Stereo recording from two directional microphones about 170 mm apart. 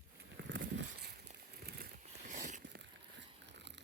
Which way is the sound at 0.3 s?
90° right.